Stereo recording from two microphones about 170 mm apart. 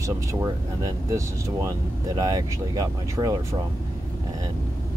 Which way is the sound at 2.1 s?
20° right (ahead or behind).